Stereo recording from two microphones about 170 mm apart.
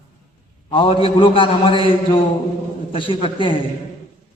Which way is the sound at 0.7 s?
30° left (ahead or behind).